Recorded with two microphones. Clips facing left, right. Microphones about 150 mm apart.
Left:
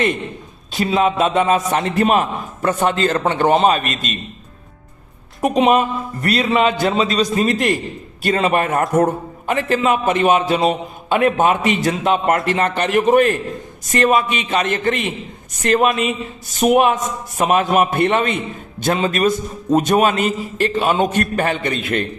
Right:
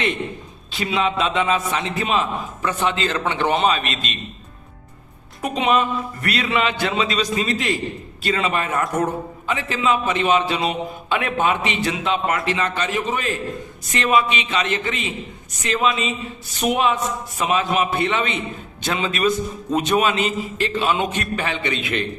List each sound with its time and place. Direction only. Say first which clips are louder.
0.7 s a man's voice: left 5 dB; 40° left (ahead or behind)
5.4 s a man's voice: left 5 dB; 40° left (ahead or behind)